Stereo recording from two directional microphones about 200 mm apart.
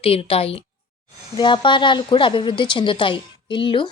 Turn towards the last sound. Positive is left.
turn(degrees=25)  # may be behind; listen again after turning